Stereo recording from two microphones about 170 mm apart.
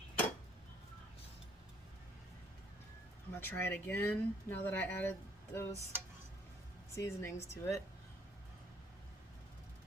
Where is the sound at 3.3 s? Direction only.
15° left (ahead or behind).